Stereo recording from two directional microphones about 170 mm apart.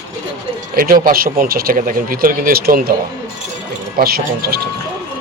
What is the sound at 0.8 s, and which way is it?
Speech, 55° right (ahead or behind).